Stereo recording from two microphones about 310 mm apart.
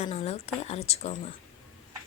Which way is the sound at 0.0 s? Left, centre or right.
Centre.